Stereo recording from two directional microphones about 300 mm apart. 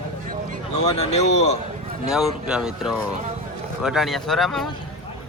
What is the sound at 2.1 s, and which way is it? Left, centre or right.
A man's voice, centre.